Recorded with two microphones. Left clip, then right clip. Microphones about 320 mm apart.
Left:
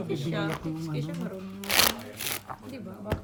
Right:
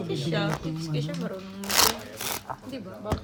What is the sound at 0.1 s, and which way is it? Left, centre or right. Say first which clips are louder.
Speech: right 3 dB; right.